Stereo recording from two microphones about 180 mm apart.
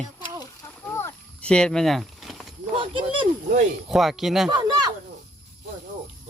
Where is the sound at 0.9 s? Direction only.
10° left (ahead or behind).